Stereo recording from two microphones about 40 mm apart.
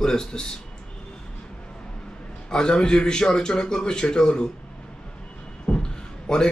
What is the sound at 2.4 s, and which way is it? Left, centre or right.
A man's voice, centre.